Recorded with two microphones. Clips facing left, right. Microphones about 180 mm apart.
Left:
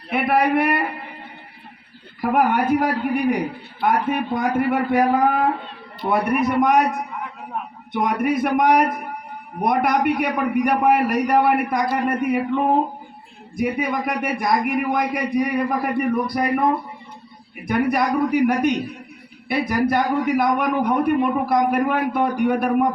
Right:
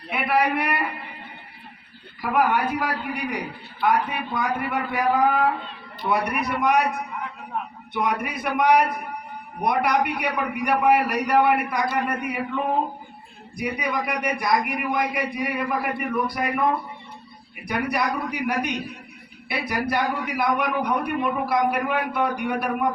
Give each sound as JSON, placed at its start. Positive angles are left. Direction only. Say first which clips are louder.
{"t": 0.1, "sound": "a man's voice", "louder": "left 4 dB", "side_deg": 50}
{"t": 2.2, "sound": "a man's voice", "louder": "left 3 dB", "side_deg": 50}
{"t": 7.9, "sound": "a man's voice", "louder": "left 6 dB", "side_deg": 45}
{"t": 13.6, "sound": "a man's voice", "louder": "left 5 dB", "side_deg": 45}
{"t": 17.7, "sound": "a man's voice", "louder": "left 5 dB", "side_deg": 45}